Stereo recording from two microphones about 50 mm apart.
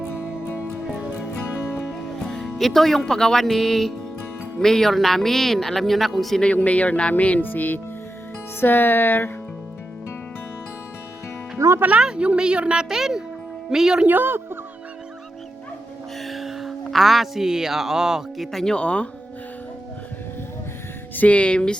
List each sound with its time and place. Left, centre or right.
0.1 s music: left
0.9 s music: right
2.1 s music: centre
2.6 s speech: centre
6.4 s speech: left
8.6 s music: left
11.5 s music: right
11.9 s speech: centre
14.1 s speech: right
16.2 s speech: centre
18.5 s speech: centre
18.8 s speech: left
21.2 s speech: left